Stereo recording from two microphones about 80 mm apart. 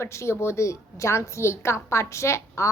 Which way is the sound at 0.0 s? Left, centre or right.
Left.